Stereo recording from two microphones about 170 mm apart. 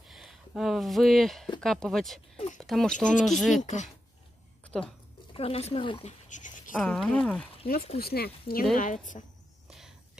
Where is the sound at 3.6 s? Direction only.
45° left (ahead or behind).